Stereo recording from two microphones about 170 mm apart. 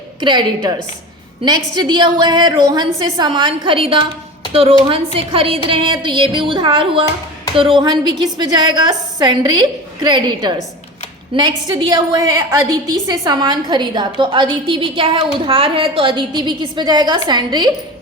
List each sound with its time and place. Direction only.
0.2 s a woman's voice: 25° right (ahead or behind)
5.1 s a woman's voice: 35° right (ahead or behind)